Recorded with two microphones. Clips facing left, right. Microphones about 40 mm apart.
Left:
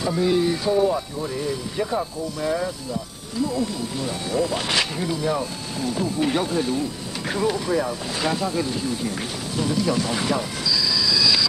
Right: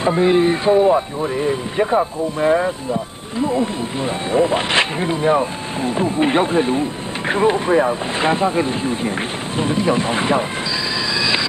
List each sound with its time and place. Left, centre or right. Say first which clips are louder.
0.0 s speech: right 6 dB; right
11.0 s train: right 2 dB; right